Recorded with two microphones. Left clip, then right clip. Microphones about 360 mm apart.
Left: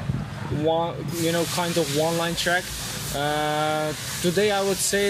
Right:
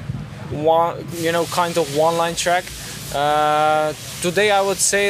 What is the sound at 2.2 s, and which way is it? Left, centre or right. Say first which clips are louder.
Speech: right 5 dB; centre.